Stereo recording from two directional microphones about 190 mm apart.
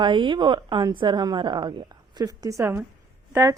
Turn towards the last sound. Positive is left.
turn(degrees=-15)  # may be behind; listen again after turning